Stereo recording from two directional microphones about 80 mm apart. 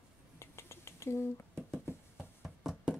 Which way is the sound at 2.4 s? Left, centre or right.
Centre.